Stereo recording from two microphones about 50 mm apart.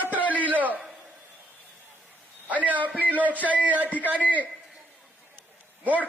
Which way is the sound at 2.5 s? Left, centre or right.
Right.